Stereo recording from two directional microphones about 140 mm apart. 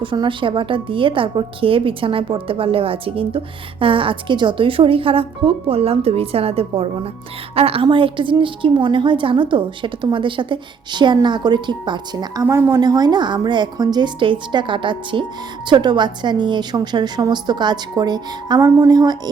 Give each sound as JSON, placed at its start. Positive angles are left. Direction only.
{"t": 0.0, "sound": "a woman's voice", "side_deg": -35}